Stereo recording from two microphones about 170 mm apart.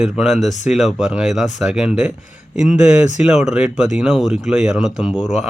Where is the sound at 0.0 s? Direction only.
Centre (ahead or behind).